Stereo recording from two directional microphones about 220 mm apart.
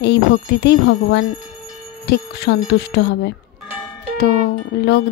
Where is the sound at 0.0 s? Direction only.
50° left (ahead or behind).